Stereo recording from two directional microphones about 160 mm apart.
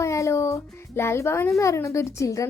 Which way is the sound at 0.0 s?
20° left (ahead or behind).